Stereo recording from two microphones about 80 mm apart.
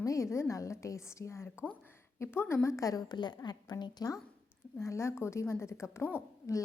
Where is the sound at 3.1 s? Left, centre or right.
Left.